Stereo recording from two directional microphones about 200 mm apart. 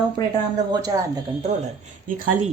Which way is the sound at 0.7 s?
20° right (ahead or behind).